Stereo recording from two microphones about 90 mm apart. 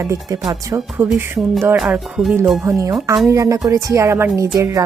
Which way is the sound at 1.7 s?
15° right (ahead or behind).